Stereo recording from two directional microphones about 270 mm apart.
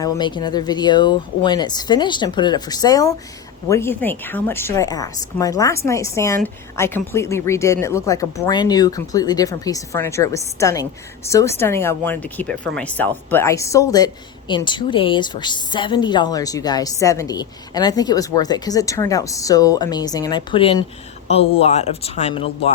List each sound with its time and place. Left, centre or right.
0.0 s speech: centre